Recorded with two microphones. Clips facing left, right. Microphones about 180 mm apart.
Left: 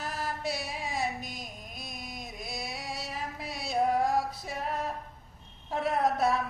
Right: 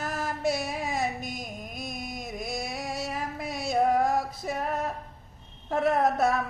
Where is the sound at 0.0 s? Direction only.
45° right (ahead or behind).